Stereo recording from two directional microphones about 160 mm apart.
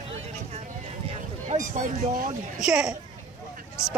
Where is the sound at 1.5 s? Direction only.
55° right (ahead or behind).